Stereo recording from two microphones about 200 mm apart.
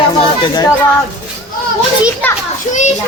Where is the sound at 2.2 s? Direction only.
5° left (ahead or behind).